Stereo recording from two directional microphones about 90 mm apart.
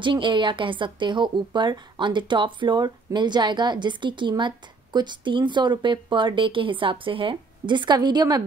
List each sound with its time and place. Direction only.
0.0 s a woman's voice: 65° right (ahead or behind)